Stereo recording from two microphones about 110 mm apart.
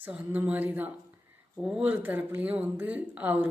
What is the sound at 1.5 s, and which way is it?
Speech, 5° right (ahead or behind).